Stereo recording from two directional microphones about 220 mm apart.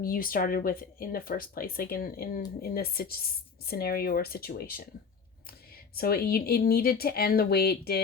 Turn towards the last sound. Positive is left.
turn(degrees=45)  # may be behind; listen again after turning